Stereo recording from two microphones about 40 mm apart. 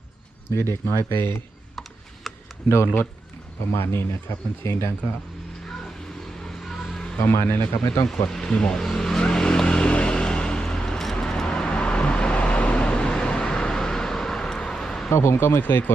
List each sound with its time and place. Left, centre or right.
0.5 s speech: left
2.3 s a sound: centre
2.8 s speech: left
3.7 s speech: left
6.6 s vehicle: centre
6.9 s a sound: centre
7.2 s speech: left
8.3 s speech: centre
9.1 s vehicle: left
10.9 s vehicle: centre
13.4 s a sound: centre
15.1 s speech: left
15.6 s speech: left